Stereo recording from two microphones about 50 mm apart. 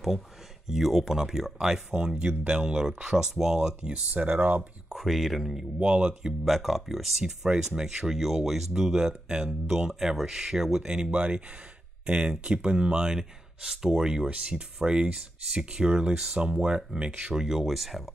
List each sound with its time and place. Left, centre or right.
0.7 s speech: centre
2.2 s speech: right
4.8 s speech: centre
5.8 s speech: right; by 18.1 s centre